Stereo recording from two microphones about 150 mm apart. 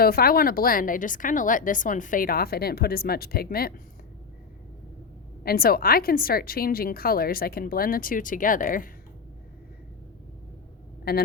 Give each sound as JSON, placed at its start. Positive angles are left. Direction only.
{"t": 0.0, "sound": "a woman's voice", "side_deg": 90}
{"t": 5.4, "sound": "a woman's voice", "side_deg": 85}
{"t": 11.1, "sound": "a man's voice", "side_deg": 90}